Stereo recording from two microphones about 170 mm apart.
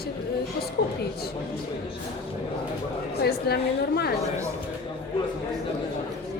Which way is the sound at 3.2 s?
70° left (ahead or behind).